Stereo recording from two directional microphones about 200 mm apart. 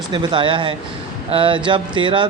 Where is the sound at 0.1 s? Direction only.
25° right (ahead or behind).